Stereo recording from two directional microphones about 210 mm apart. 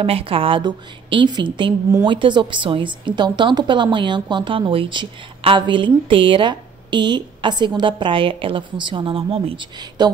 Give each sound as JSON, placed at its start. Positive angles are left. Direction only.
{"t": 0.0, "sound": "a woman's voice", "side_deg": -25}